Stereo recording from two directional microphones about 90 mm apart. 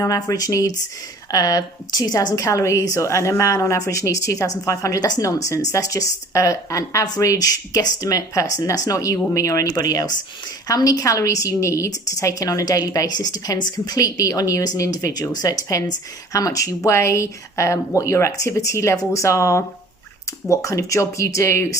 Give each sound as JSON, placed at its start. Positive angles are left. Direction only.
{"t": 0.0, "sound": "a woman's voice", "side_deg": 40}